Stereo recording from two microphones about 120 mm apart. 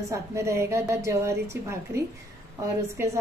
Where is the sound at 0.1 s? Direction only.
25° right (ahead or behind).